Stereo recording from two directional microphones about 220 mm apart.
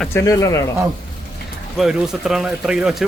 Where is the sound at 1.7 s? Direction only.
Centre (ahead or behind).